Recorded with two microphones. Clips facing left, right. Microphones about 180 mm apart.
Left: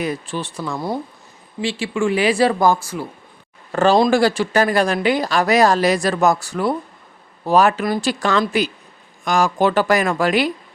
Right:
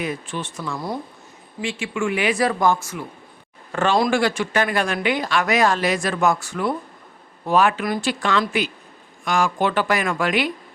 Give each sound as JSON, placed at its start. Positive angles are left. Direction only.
{"t": 0.0, "sound": "speech", "side_deg": 35}